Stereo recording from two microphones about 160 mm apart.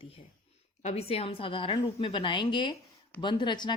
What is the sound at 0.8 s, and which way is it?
A woman's voice, 45° left (ahead or behind).